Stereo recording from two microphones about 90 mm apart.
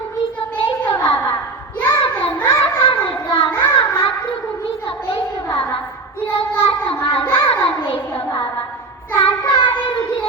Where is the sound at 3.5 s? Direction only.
25° left (ahead or behind).